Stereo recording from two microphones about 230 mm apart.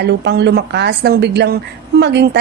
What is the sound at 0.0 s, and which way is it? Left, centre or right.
Speech, right.